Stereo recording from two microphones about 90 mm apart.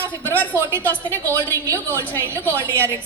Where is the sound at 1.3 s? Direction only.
25° right (ahead or behind).